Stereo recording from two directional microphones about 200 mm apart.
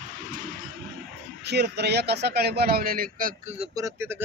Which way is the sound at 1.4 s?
55° right (ahead or behind).